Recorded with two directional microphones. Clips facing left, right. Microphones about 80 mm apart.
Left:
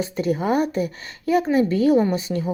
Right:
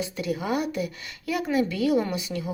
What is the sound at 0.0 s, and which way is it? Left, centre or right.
A woman's voice, left.